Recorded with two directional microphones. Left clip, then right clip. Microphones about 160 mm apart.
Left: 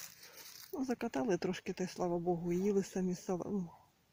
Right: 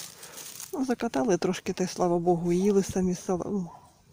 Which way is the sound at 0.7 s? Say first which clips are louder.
Right 9 dB; 5° left (ahead or behind).